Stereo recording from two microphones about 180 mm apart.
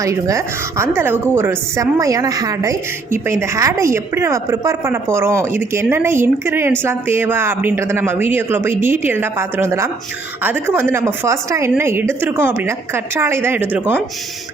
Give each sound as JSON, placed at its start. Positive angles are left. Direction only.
{"t": 0.0, "sound": "a woman's voice", "side_deg": -15}